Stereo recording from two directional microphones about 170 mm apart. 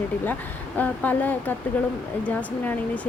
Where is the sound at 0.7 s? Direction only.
10° left (ahead or behind).